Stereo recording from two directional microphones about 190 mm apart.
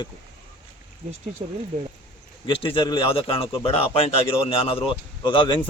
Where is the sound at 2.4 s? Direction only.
30° left (ahead or behind).